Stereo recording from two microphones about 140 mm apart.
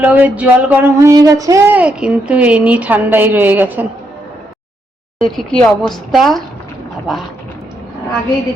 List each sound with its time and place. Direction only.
0.0 s a woman's voice: 10° right (ahead or behind)
0.9 s child singing: 25° right (ahead or behind)
1.7 s a woman's voice: 10° right (ahead or behind)
5.2 s a woman's voice: 5° left (ahead or behind)